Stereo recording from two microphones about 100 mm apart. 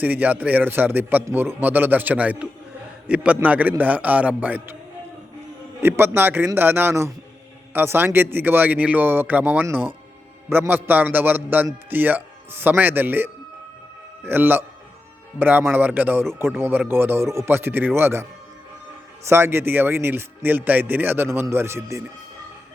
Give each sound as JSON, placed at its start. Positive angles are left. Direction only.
{"t": 0.0, "sound": "a man's voice", "side_deg": -15}
{"t": 5.8, "sound": "a man's voice", "side_deg": -20}